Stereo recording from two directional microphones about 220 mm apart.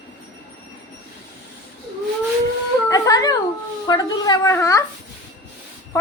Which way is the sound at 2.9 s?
15° left (ahead or behind).